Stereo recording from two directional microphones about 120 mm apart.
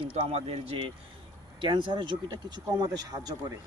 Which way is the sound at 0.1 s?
55° right (ahead or behind).